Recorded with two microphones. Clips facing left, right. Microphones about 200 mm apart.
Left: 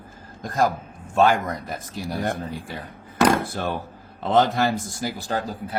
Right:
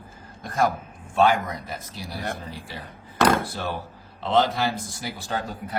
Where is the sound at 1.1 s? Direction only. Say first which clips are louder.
Left 1 dB; 45° left (ahead or behind).